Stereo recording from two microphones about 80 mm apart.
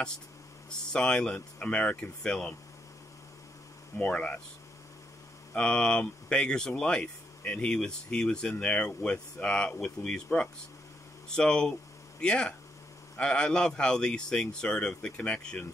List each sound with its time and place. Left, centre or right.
0.7 s speech: centre
4.0 s speech: centre
5.5 s speech: centre